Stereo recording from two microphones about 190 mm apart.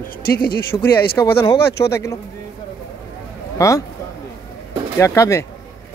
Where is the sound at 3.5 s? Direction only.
15° left (ahead or behind).